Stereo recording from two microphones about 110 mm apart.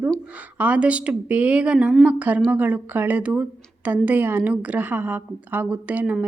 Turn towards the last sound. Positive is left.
turn(degrees=-15)  # may be behind; listen again after turning